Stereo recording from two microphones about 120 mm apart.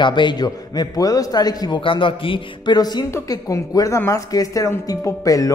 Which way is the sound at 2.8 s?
35° left (ahead or behind).